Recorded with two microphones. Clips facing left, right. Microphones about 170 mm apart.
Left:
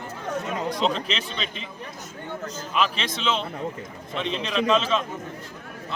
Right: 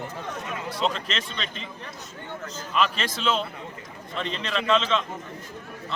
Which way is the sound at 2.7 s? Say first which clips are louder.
Even; 5° left (ahead or behind).